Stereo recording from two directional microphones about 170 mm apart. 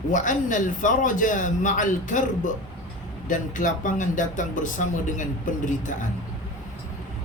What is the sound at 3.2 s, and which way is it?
Speech, 50° left (ahead or behind).